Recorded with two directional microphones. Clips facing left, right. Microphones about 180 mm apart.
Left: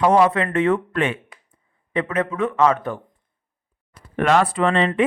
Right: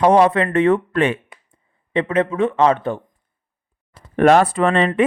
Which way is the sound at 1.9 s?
25° right (ahead or behind).